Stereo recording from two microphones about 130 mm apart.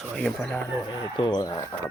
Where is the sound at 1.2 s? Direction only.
30° left (ahead or behind).